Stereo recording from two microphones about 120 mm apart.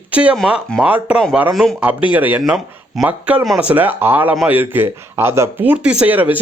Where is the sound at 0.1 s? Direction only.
10° right (ahead or behind).